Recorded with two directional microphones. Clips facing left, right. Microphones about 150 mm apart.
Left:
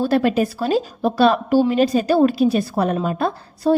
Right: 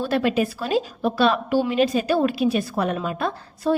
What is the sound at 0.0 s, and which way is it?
A woman's voice, 40° left (ahead or behind).